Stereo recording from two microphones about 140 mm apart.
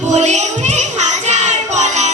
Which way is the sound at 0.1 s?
55° right (ahead or behind).